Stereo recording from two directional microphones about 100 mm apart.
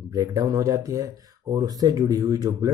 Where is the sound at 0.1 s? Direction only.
35° right (ahead or behind).